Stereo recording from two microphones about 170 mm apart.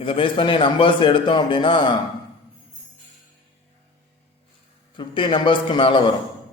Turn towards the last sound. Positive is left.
turn(degrees=30)  # may be behind; listen again after turning